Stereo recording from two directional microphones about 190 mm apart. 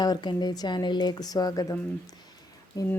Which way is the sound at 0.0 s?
20° left (ahead or behind).